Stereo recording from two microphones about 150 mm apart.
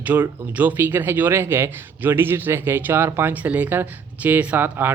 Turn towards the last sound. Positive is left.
turn(degrees=-15)  # may be behind; listen again after turning